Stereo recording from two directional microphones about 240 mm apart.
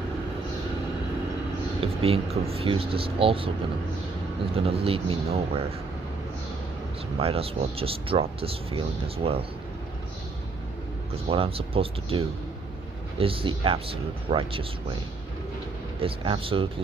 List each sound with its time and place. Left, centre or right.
1.8 s speech: right
4.6 s speech: right
7.2 s speech: right
11.2 s speech: right
16.0 s speech: right